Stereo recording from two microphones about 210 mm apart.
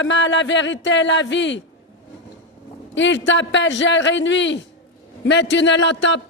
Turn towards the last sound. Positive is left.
turn(degrees=60)  # may be behind; listen again after turning